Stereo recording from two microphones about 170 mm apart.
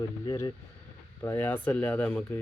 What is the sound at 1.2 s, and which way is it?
Speech, 10° left (ahead or behind).